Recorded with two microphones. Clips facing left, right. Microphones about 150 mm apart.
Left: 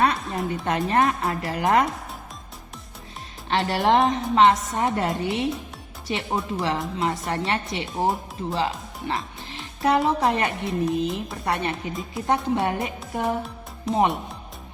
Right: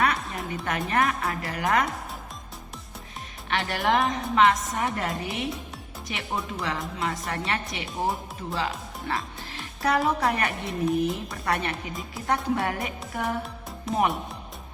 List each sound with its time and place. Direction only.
0.0 s music: 30° left (ahead or behind)
0.5 s speech: 25° left (ahead or behind)
3.5 s speech: 25° left (ahead or behind)
13.9 s speech: centre (ahead or behind)